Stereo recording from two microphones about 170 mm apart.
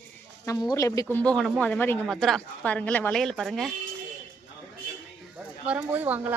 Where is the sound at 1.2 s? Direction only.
5° left (ahead or behind).